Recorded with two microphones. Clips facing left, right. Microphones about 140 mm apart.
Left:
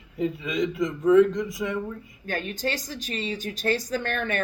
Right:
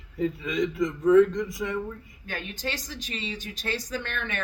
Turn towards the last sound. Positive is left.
turn(degrees=40)  # may be behind; listen again after turning